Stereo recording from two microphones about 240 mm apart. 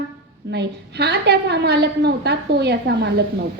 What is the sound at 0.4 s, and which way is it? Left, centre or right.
A woman's voice, right.